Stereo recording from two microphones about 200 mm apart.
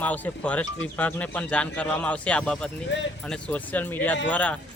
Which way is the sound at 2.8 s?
65° left (ahead or behind).